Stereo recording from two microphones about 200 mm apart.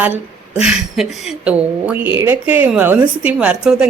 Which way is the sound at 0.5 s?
5° right (ahead or behind).